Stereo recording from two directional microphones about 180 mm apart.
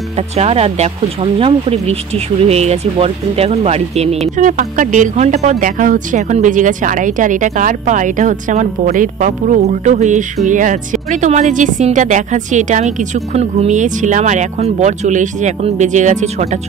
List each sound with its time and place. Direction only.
0.4 s speech: 35° right (ahead or behind)